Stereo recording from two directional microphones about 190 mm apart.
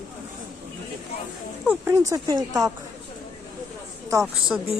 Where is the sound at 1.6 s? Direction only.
10° right (ahead or behind).